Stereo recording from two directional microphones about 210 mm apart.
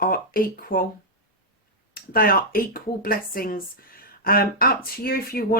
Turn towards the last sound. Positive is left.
turn(degrees=45)  # may be behind; listen again after turning